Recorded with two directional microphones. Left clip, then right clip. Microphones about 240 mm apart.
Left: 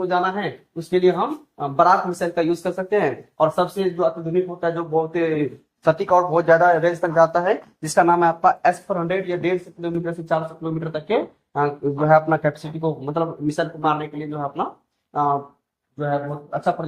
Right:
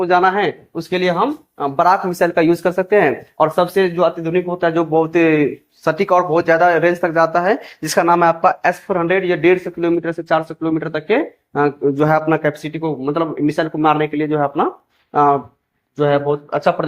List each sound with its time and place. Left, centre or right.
0.0 s speech: right
1.5 s speech: right